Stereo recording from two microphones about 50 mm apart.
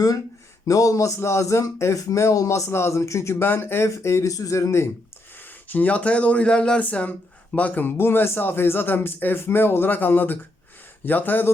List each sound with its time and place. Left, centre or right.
0.7 s speech: left
3.4 s speech: left
3.8 s speech: left
5.6 s speech: left; by 6.7 s centre
6.7 s speech: left
7.9 s speech: left